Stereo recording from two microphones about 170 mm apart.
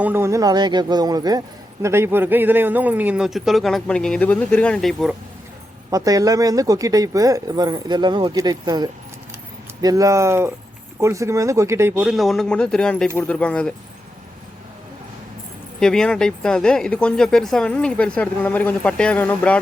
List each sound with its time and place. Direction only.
0.0 s speech: 15° right (ahead or behind)
5.9 s speech: 20° right (ahead or behind); by 13.7 s 5° left (ahead or behind)
15.8 s speech: 5° left (ahead or behind)